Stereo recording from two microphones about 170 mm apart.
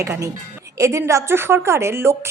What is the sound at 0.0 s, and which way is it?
A woman's voice, 20° right (ahead or behind).